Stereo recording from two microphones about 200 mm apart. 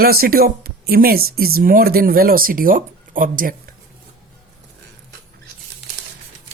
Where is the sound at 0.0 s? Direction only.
50° right (ahead or behind).